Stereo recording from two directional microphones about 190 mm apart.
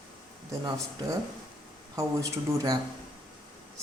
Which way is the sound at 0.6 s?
15° right (ahead or behind).